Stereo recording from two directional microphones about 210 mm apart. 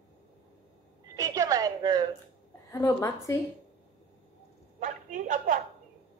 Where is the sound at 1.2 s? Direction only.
15° right (ahead or behind).